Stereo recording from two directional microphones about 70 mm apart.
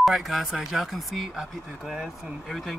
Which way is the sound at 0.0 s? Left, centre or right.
Centre.